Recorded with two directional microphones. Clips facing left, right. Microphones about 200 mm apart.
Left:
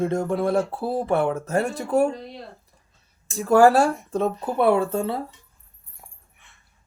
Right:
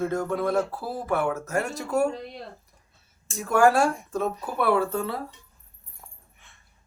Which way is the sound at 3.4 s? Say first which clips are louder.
Left 4 dB; 35° left (ahead or behind).